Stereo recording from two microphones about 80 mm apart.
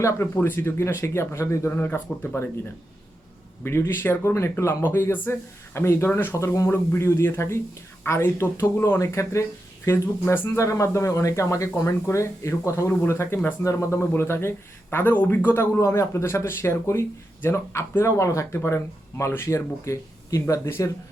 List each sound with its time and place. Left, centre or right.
0.3 s speech: left
3.6 s speech: left
6.3 s speech: left
15.8 s speech: left